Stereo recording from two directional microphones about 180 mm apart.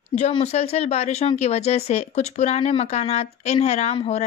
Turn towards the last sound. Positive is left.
turn(degrees=35)  # may be behind; listen again after turning